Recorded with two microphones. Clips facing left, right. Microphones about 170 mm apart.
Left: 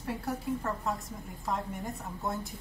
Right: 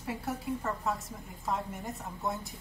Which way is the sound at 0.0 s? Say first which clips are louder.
Left 1 dB; centre (ahead or behind).